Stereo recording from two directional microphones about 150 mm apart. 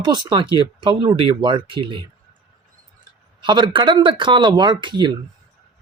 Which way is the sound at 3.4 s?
30° right (ahead or behind).